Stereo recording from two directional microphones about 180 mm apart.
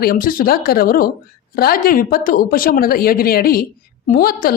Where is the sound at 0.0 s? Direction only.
55° left (ahead or behind).